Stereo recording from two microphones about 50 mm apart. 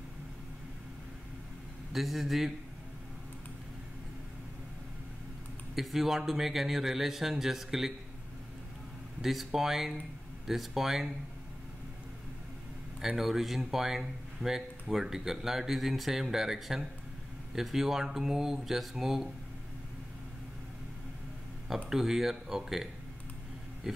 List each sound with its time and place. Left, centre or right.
1.9 s speech: centre
5.8 s speech: centre
9.2 s speech: centre
13.0 s speech: centre
21.8 s speech: centre